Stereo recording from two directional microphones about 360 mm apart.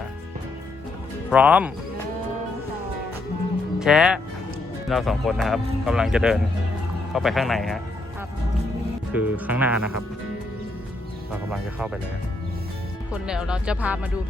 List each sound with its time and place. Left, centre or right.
1.3 s speech: centre
3.8 s speech: centre
9.1 s speech: centre
11.5 s speech: centre
13.2 s speech: centre